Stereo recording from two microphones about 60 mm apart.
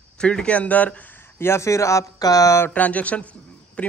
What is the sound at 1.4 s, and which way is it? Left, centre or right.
Speech, left.